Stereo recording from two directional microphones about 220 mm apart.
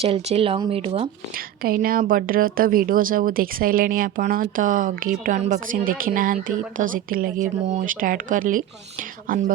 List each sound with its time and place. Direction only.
0.0 s speech: 30° right (ahead or behind)
1.6 s speech: 40° right (ahead or behind)